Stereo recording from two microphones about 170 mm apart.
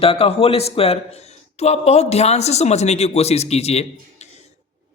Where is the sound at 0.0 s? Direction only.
35° left (ahead or behind).